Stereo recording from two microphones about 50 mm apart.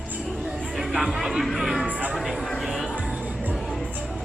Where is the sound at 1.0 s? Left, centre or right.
Centre.